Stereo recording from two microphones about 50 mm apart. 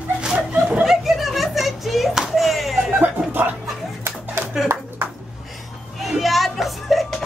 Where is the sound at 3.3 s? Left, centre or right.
Right.